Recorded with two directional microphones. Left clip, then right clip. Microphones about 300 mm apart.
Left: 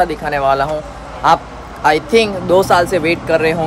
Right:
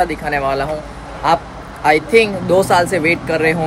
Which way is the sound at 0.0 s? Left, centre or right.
Centre.